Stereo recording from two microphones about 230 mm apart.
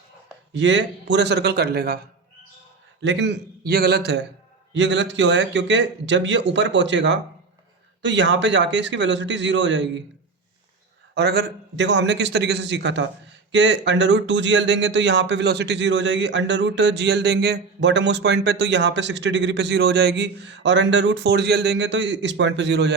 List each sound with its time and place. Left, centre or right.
0.5 s speech: right
3.0 s speech: right
11.1 s speech: right